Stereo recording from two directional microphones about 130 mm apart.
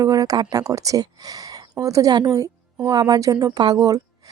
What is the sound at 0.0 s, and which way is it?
A woman's voice, 30° right (ahead or behind).